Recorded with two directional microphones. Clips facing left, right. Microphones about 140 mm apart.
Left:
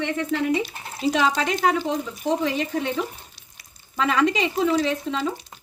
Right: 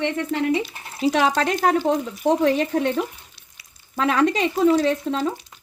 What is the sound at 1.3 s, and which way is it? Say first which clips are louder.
A woman's voice: right 2 dB; 50° right (ahead or behind).